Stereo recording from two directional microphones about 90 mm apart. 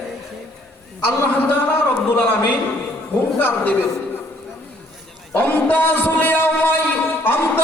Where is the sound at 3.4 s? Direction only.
20° left (ahead or behind).